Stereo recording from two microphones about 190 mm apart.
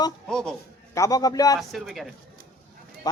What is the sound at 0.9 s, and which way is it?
Speech, 15° left (ahead or behind).